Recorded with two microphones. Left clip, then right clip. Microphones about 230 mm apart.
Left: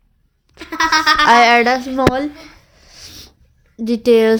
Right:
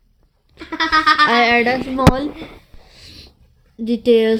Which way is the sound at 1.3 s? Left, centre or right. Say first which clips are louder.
Left 4 dB; centre.